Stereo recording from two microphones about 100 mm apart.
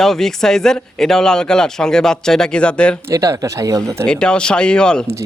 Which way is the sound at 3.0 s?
30° right (ahead or behind).